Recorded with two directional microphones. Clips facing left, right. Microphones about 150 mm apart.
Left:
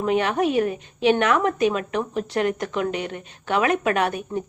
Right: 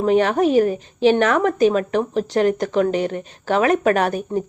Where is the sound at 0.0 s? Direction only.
35° right (ahead or behind).